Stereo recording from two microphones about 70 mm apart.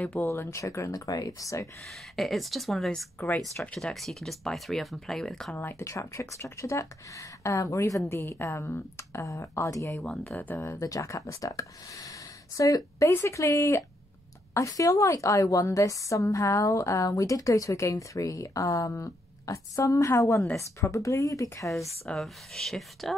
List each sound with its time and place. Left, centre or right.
0.0 s speech: left
0.3 s a woman's voice: left
1.9 s speech: centre
5.6 s a woman's voice: left
5.9 s a woman's voice: left
8.0 s a woman's voice: left
10.9 s a woman's voice: left
14.5 s a woman's voice: left
22.0 s speech: centre